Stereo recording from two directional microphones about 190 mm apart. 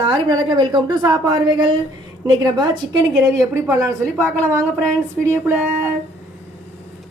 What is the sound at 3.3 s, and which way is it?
Speech, 15° right (ahead or behind).